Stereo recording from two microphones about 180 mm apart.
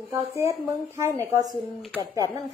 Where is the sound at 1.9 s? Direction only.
20° right (ahead or behind).